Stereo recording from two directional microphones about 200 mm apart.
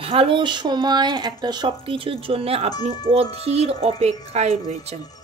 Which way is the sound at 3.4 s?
30° right (ahead or behind).